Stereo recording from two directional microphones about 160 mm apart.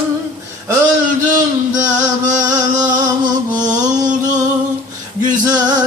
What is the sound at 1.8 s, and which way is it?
Music, 50° right (ahead or behind).